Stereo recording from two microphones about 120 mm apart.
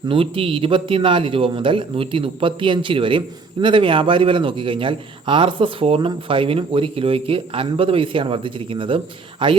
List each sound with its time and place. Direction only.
0.1 s a man's voice: 50° right (ahead or behind)